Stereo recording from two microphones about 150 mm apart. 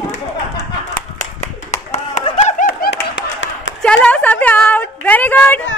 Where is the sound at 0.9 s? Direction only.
55° left (ahead or behind).